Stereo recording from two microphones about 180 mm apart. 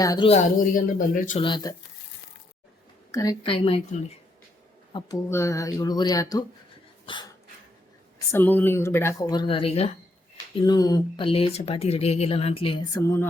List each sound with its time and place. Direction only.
0.0 s speech: 20° left (ahead or behind)
0.3 s speech: 45° left (ahead or behind)
1.4 s speech: 25° left (ahead or behind)
3.1 s speech: 20° left (ahead or behind)
4.9 s speech: 20° left (ahead or behind)
7.0 s dog: 25° left (ahead or behind)
8.3 s speech: 10° left (ahead or behind); by 9.9 s 35° left (ahead or behind)
10.7 s speech: 20° left (ahead or behind)